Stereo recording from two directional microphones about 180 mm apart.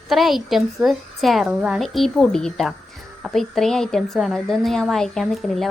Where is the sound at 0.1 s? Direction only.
Centre (ahead or behind).